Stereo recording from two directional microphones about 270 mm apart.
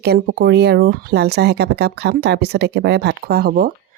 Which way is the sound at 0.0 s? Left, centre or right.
Right.